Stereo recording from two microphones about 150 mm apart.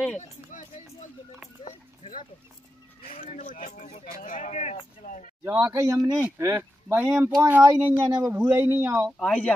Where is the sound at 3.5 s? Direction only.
65° left (ahead or behind).